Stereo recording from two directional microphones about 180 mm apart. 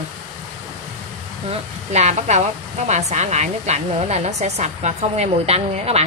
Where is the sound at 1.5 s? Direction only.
40° right (ahead or behind).